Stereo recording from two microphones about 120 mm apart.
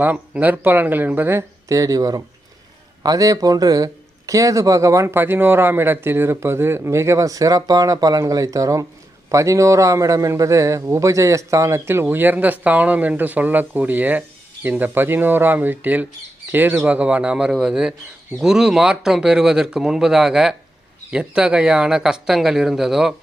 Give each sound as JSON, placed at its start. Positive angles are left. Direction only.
{"t": 0.0, "sound": "a man's voice", "side_deg": -15}